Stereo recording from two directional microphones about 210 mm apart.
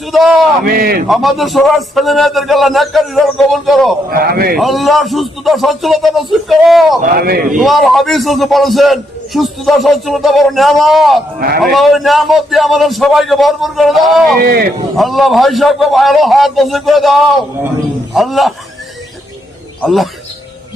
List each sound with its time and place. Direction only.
0.1 s a man's voice: centre (ahead or behind)
0.6 s a man's voice: 45° right (ahead or behind)
1.0 s a man's voice: centre (ahead or behind)
4.1 s a man's voice: 45° right (ahead or behind)
4.5 s a man's voice: centre (ahead or behind)
7.0 s a man's voice: 45° right (ahead or behind)
7.5 s a man's voice: centre (ahead or behind)
11.3 s a man's voice: 45° right (ahead or behind)
11.6 s a man's voice: centre (ahead or behind)
14.4 s a man's voice: 45° right (ahead or behind)
14.9 s a man's voice: centre (ahead or behind)
19.8 s a man's voice: centre (ahead or behind)